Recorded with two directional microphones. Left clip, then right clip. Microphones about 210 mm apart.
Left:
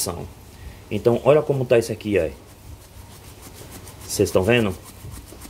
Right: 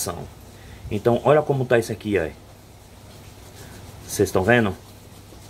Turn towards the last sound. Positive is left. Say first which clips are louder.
# even
turn(degrees=15)  # may be behind; listen again after turning